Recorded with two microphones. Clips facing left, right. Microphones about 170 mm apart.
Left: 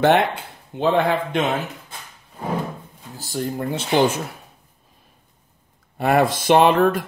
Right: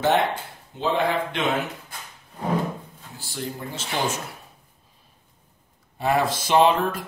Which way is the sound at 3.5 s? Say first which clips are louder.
Left 14 dB; 60° left (ahead or behind).